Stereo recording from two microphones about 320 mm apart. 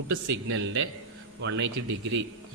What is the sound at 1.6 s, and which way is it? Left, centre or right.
Speech, right.